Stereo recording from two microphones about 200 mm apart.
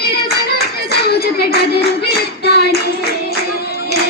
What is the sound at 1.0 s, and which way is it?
Clapping, 55° left (ahead or behind).